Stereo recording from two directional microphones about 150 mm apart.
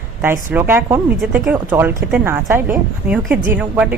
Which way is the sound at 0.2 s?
15° right (ahead or behind).